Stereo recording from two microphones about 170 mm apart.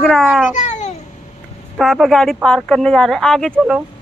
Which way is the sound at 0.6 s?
45° left (ahead or behind).